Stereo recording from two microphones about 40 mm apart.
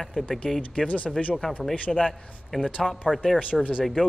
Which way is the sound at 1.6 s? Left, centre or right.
Centre.